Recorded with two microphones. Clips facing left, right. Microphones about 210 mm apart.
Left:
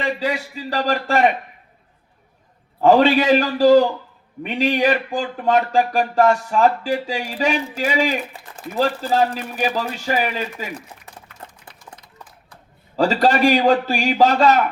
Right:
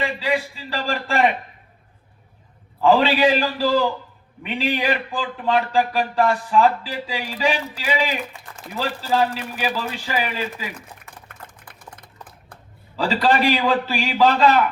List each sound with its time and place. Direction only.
0.2 s speech: 45° left (ahead or behind)
2.8 s speech: 45° left (ahead or behind)
11.7 s a sound: 55° right (ahead or behind)
13.0 s speech: 45° left (ahead or behind)